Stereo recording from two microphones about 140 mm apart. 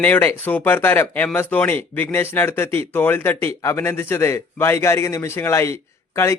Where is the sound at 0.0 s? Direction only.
15° left (ahead or behind).